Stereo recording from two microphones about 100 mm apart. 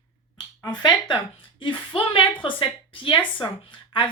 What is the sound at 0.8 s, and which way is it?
Speech, 45° left (ahead or behind).